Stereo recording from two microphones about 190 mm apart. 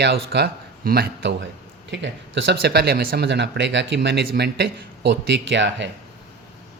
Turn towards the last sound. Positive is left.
turn(degrees=-70)  # may be behind; listen again after turning